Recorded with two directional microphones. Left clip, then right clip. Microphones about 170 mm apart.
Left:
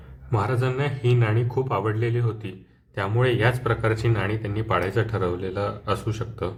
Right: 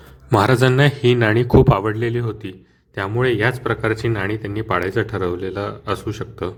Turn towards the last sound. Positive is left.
turn(degrees=-35)  # may be behind; listen again after turning